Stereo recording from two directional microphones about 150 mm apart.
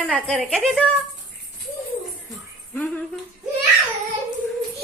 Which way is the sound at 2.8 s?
5° left (ahead or behind).